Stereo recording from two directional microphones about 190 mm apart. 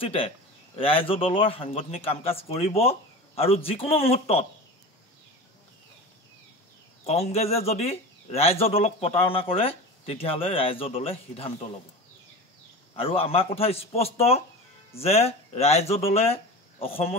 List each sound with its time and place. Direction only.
0.0 s a man's voice: 30° left (ahead or behind)
7.1 s a man's voice: 35° left (ahead or behind)
12.9 s a man's voice: 30° left (ahead or behind)